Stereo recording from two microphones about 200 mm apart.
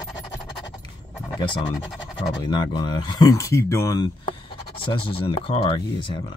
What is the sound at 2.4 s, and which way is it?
Speech, 20° left (ahead or behind).